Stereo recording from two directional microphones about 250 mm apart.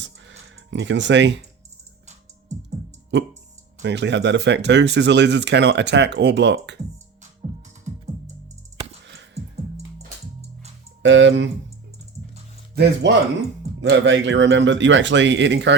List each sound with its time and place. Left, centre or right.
0.0 s a sound: right
3.8 s speech: right
11.0 s speech: right
12.7 s speech: right